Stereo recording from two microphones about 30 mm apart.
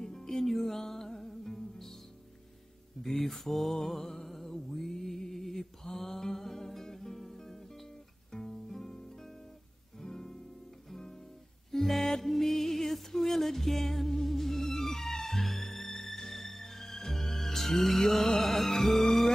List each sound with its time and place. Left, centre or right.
0.0 s music: centre
3.2 s mantra: centre
5.9 s music: centre
8.3 s guitar: centre
8.7 s music: centre
15.4 s music: centre